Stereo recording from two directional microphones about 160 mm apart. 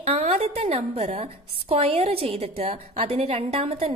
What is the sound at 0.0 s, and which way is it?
A woman's voice, 45° right (ahead or behind).